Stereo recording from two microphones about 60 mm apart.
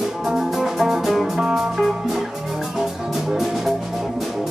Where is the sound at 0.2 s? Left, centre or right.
Centre.